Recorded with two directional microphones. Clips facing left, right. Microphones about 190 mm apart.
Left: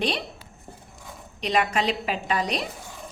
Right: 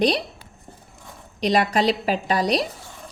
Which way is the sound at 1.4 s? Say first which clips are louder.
Right 4 dB; 35° right (ahead or behind).